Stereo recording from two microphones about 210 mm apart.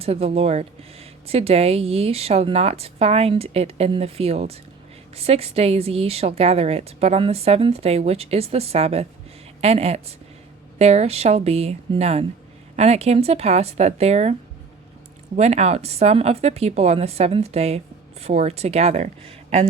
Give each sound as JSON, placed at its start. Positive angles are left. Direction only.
{"t": 0.0, "sound": "speech", "side_deg": -30}
{"t": 15.4, "sound": "speech", "side_deg": -30}